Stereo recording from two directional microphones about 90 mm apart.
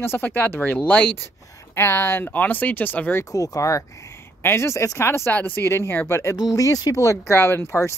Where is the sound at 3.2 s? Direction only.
40° left (ahead or behind).